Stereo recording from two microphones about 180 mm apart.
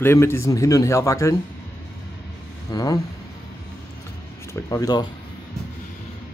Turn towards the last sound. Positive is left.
turn(degrees=20)  # may be behind; listen again after turning